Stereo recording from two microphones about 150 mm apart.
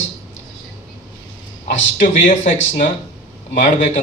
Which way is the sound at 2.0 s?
55° left (ahead or behind).